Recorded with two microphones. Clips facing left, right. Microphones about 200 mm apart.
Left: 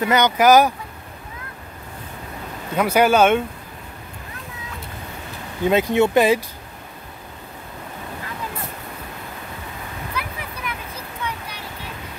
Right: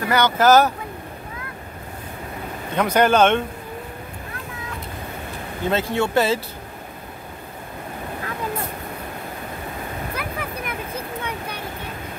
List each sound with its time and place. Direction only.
0.0 s speech: 20° left (ahead or behind)
2.7 s speech: 10° left (ahead or behind)
5.6 s speech: 15° left (ahead or behind)
10.1 s a sound: 50° right (ahead or behind)
11.2 s vehicle: 55° right (ahead or behind)